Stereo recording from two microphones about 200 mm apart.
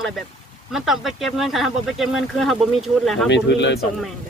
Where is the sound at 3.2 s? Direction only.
60° left (ahead or behind).